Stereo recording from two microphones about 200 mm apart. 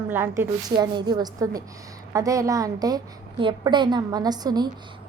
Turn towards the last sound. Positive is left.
turn(degrees=-20)  # may be behind; listen again after turning